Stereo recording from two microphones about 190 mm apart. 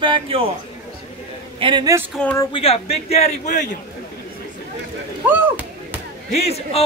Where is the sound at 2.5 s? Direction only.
30° left (ahead or behind).